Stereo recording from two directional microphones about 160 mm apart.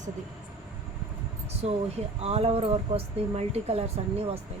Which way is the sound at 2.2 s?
40° right (ahead or behind).